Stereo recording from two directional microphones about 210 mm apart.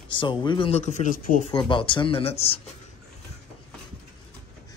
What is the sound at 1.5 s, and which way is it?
Speech, 25° left (ahead or behind).